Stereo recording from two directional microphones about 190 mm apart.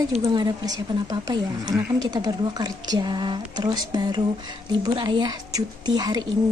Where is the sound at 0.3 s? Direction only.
25° right (ahead or behind).